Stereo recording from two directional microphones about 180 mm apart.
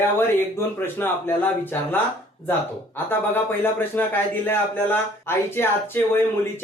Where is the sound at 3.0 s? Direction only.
10° left (ahead or behind).